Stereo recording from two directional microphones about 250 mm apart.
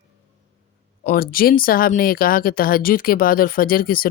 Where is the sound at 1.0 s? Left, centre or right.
Left.